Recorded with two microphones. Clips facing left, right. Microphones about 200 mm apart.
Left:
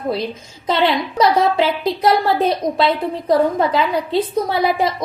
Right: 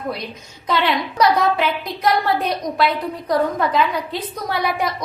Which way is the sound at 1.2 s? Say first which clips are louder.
Left 2 dB; 30° left (ahead or behind).